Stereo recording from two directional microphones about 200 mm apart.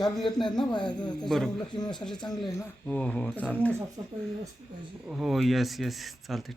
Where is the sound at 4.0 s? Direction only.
25° right (ahead or behind).